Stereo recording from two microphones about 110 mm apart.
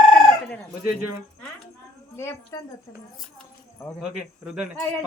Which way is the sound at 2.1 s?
25° left (ahead or behind).